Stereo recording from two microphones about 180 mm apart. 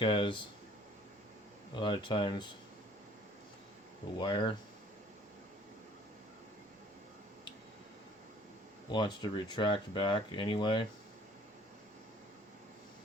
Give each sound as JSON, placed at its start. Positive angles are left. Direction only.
{"t": 0.0, "sound": "speech", "side_deg": 30}
{"t": 1.7, "sound": "speech", "side_deg": 25}
{"t": 4.2, "sound": "speech", "side_deg": 25}
{"t": 8.9, "sound": "speech", "side_deg": 25}